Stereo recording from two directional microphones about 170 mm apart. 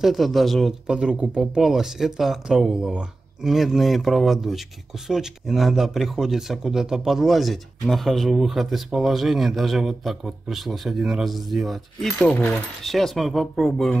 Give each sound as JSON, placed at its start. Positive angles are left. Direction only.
{"t": 0.0, "sound": "speech", "side_deg": 0}